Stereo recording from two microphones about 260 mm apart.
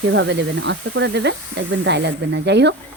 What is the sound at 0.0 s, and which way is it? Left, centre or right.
Speech, right.